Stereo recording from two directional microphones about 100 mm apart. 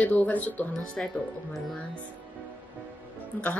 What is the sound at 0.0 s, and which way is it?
Speech, 15° left (ahead or behind).